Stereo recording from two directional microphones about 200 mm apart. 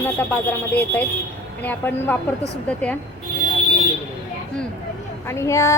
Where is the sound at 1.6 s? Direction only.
10° left (ahead or behind).